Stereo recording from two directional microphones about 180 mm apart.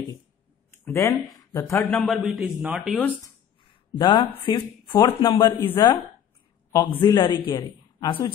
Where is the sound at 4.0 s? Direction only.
25° left (ahead or behind).